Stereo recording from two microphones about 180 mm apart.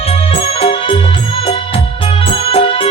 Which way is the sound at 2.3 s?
30° left (ahead or behind).